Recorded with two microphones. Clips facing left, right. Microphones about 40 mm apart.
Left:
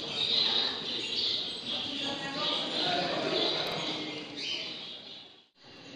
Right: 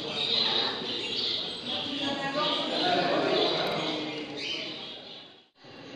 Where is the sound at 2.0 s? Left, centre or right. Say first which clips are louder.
Right 7 dB; centre.